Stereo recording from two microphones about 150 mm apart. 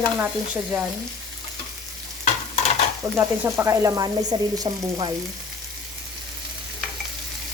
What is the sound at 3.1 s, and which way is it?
Frying, 15° right (ahead or behind).